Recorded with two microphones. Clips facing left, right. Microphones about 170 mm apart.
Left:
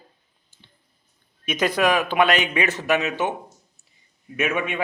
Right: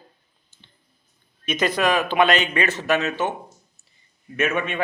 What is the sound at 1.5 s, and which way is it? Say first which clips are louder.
A man's voice: left 1 dB; 10° left (ahead or behind).